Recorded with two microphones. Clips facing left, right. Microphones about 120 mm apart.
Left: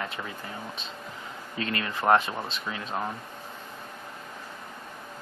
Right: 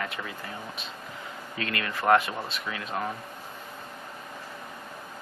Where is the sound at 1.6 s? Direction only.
30° left (ahead or behind).